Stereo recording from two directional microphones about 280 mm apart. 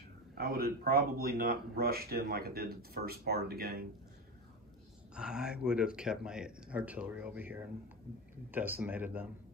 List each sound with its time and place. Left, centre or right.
0.4 s speech: right
5.1 s speech: centre